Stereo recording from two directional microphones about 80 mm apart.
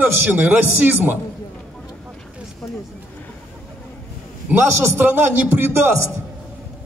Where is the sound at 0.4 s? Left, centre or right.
Right.